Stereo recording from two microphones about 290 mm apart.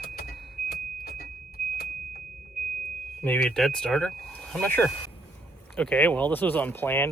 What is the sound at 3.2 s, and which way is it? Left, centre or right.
Speech, centre.